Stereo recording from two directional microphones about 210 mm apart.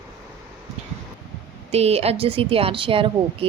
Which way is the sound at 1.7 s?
30° right (ahead or behind).